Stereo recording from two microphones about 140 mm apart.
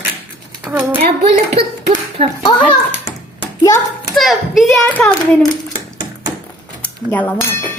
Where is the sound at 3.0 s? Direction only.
20° left (ahead or behind).